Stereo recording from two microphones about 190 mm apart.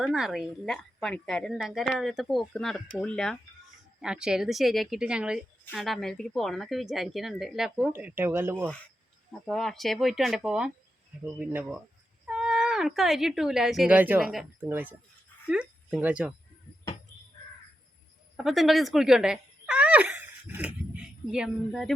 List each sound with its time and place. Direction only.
0.0 s a woman's voice: centre (ahead or behind)
9.5 s a woman's voice: centre (ahead or behind)
18.3 s speech: centre (ahead or behind)